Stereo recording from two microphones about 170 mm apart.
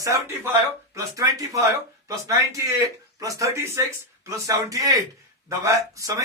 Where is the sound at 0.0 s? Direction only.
15° right (ahead or behind).